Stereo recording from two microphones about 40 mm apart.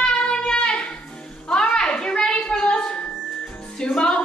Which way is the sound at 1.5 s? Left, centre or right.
Centre.